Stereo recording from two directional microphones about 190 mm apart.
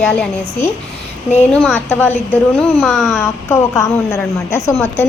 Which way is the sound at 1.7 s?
10° left (ahead or behind).